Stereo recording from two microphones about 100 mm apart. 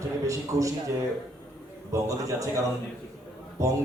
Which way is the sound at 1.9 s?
35° right (ahead or behind).